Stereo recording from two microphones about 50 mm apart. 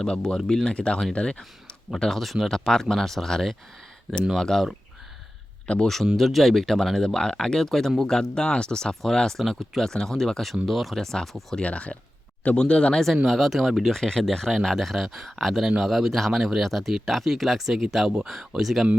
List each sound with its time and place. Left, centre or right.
0.0 s speech: centre
2.0 s speech: centre
5.6 s speech: left
6.1 s speech: centre
11.6 s speech: left
13.2 s speech: centre
13.9 s speech: centre